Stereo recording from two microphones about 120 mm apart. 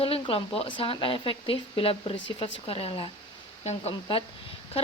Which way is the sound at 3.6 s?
65° left (ahead or behind).